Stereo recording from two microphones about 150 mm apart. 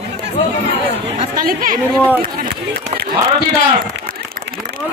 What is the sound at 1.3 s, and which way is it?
Speech, 70° right (ahead or behind).